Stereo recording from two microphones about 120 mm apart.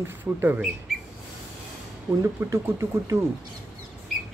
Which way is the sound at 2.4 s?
25° right (ahead or behind).